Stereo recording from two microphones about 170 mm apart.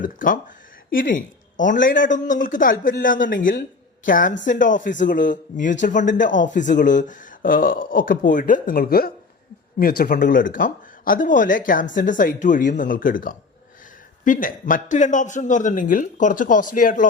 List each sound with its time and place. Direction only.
0.0 s a woman's voice: 55° left (ahead or behind)
10.0 s speech: 50° left (ahead or behind)